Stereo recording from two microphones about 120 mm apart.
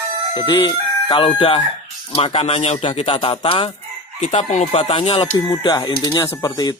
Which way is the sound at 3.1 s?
45° left (ahead or behind).